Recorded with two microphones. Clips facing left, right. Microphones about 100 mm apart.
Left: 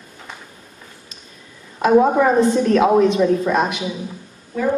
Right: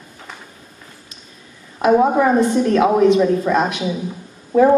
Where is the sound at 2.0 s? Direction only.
20° right (ahead or behind).